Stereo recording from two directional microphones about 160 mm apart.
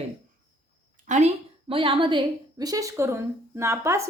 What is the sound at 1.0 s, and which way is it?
A woman's voice, 45° right (ahead or behind).